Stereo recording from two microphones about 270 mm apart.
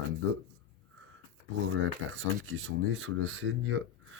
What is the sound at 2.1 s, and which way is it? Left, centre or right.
Speech, right.